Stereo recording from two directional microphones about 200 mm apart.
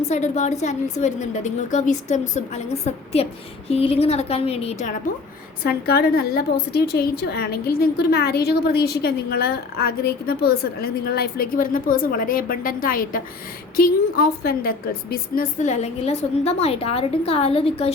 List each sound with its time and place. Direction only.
0.0 s a woman's voice: 35° left (ahead or behind)
5.6 s a woman's voice: 50° left (ahead or behind); by 17.9 s 30° left (ahead or behind)